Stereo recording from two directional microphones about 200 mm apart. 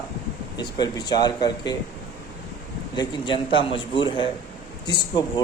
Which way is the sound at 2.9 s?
20° left (ahead or behind).